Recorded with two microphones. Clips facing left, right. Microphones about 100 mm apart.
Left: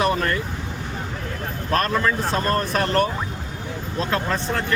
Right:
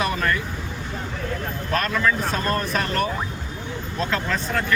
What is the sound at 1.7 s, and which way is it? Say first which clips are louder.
Speech: left 2 dB; 45° left (ahead or behind).